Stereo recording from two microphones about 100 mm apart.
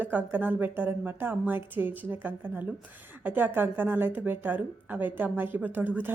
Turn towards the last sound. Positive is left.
turn(degrees=-20)  # may be behind; listen again after turning